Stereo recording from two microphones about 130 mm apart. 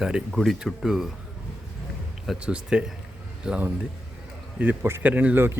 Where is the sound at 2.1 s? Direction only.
5° right (ahead or behind).